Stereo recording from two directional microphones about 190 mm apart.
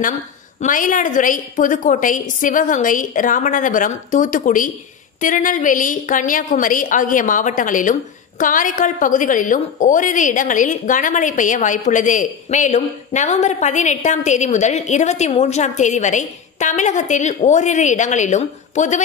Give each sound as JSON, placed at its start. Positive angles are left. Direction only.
{"t": 0.6, "sound": "a woman's voice", "side_deg": 45}